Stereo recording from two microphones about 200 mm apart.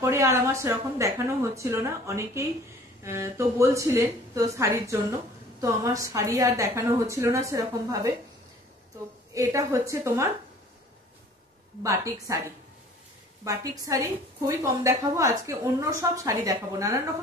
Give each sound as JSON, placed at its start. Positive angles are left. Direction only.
{"t": 0.0, "sound": "a woman's voice", "side_deg": -15}
{"t": 9.3, "sound": "a woman's voice", "side_deg": -15}
{"t": 11.8, "sound": "a woman's voice", "side_deg": -15}